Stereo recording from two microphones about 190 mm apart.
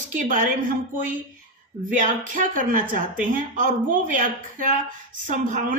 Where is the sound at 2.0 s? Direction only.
45° right (ahead or behind).